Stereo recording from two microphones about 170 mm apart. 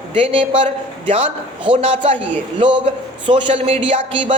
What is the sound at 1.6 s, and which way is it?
A man's voice, 30° right (ahead or behind).